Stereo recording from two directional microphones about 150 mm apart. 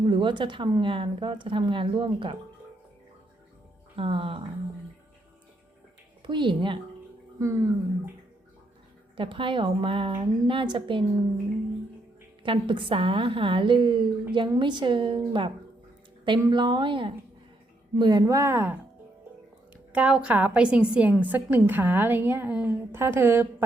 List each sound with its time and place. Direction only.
0.0 s speech: 30° right (ahead or behind)
3.9 s speech: 35° right (ahead or behind)
6.2 s speech: 30° right (ahead or behind)
7.3 s a woman's voice: 20° right (ahead or behind)
9.1 s speech: 35° right (ahead or behind)
12.4 s a woman's voice: 35° right (ahead or behind); by 18.7 s 15° right (ahead or behind)
19.7 s a woman's voice: 10° right (ahead or behind)